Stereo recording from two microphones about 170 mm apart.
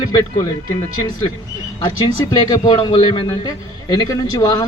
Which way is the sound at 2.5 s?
25° left (ahead or behind).